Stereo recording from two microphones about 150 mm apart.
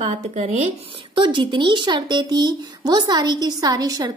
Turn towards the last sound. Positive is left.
turn(degrees=-25)  # may be behind; listen again after turning